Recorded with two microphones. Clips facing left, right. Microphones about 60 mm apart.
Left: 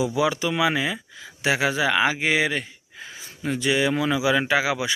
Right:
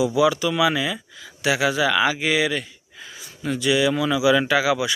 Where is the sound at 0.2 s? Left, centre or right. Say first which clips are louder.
Right 4 dB; left.